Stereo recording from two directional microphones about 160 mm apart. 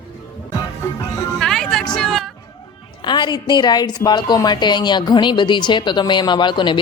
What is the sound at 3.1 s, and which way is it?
A woman's voice, 30° left (ahead or behind).